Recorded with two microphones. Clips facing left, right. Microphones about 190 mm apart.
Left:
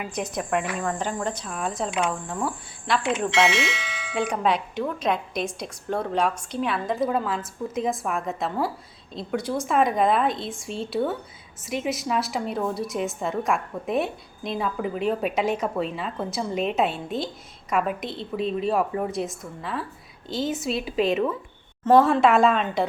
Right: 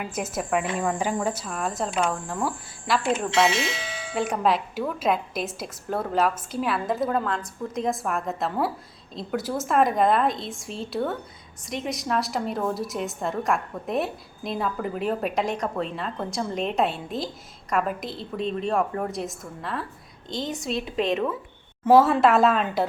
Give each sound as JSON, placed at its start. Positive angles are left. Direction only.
{"t": 0.0, "sound": "a woman's voice", "side_deg": -5}
{"t": 3.5, "sound": "speech", "side_deg": -35}
{"t": 4.1, "sound": "a woman's voice", "side_deg": 0}